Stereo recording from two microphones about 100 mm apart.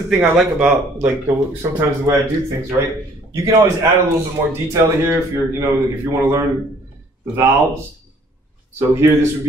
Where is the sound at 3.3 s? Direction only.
30° right (ahead or behind).